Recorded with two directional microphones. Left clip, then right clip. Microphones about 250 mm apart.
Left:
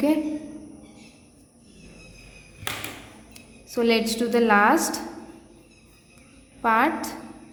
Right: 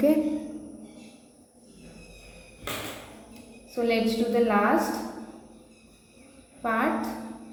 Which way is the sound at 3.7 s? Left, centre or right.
Left.